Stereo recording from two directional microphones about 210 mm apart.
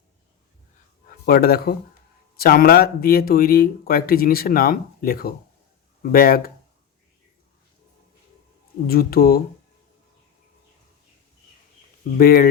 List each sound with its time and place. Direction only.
1.2 s speech: 45° left (ahead or behind)
8.9 s speech: 45° left (ahead or behind)
12.1 s speech: 45° left (ahead or behind)